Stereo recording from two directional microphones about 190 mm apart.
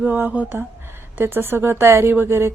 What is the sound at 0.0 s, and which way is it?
A woman's voice, 10° right (ahead or behind).